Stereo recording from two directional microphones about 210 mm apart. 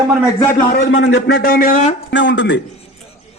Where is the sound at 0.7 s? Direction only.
55° left (ahead or behind); by 1.9 s 35° left (ahead or behind).